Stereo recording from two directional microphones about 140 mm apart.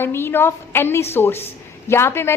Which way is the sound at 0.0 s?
15° left (ahead or behind).